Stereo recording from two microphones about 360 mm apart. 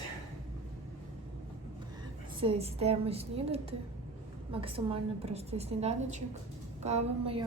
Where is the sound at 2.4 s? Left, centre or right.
Centre.